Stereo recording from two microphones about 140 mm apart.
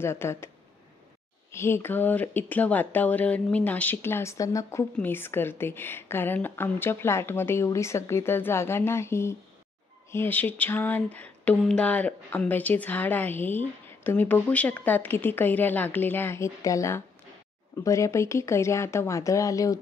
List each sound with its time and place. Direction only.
0.0 s speech: 20° left (ahead or behind)
1.5 s speech: 20° left (ahead or behind)